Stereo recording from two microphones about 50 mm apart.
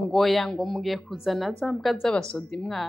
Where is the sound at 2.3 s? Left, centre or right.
Centre.